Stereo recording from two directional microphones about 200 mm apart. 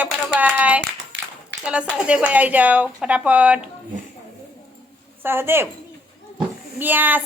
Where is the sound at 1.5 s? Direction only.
65° right (ahead or behind).